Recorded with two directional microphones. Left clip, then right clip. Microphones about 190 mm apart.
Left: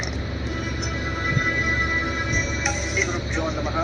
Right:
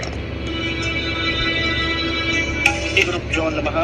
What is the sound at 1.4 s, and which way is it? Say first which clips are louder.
Music: left 1 dB; 55° right (ahead or behind).